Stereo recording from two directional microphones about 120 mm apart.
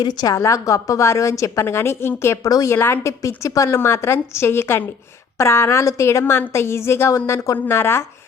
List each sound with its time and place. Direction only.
0.0 s a woman's voice: 35° left (ahead or behind)